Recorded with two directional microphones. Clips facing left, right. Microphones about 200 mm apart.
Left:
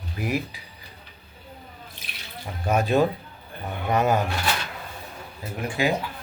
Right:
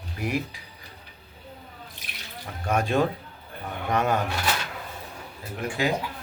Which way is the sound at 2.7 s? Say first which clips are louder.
Left 3 dB; 5° left (ahead or behind).